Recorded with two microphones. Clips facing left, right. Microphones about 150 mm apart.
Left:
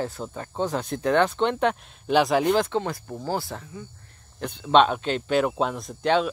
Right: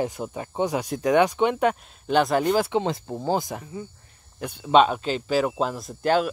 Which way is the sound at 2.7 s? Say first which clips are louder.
Right 3 dB; 20° right (ahead or behind).